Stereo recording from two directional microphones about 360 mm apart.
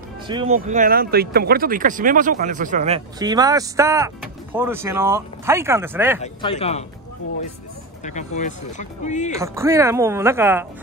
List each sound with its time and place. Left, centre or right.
0.3 s speech: centre
6.2 s speech: centre
8.0 s speech: centre
9.3 s speech: centre